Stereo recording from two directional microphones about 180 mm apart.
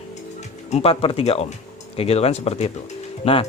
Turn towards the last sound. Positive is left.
turn(degrees=30)  # may be behind; listen again after turning